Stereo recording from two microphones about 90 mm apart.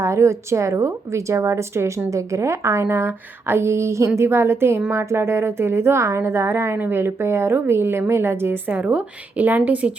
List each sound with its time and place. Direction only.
0.0 s a woman's voice: 30° right (ahead or behind); by 9.9 s 15° right (ahead or behind)